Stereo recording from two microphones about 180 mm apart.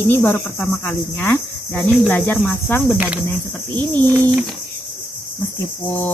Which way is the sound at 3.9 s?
25° right (ahead or behind).